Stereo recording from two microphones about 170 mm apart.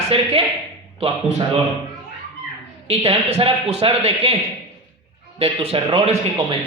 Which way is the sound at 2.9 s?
35° right (ahead or behind).